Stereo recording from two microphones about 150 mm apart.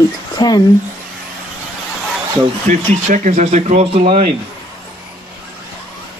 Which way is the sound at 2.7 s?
55° right (ahead or behind).